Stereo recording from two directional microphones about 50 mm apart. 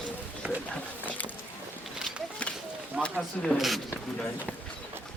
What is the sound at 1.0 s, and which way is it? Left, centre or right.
Boat, left.